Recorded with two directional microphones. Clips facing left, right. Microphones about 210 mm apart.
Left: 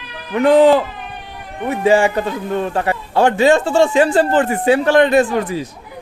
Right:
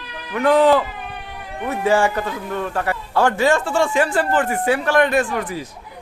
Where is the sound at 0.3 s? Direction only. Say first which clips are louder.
Left 4 dB; 20° left (ahead or behind).